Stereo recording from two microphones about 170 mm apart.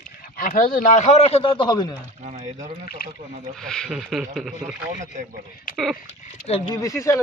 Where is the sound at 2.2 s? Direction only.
50° right (ahead or behind).